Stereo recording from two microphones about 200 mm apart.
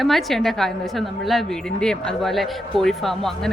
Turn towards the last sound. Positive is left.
turn(degrees=0)  # may be behind; listen again after turning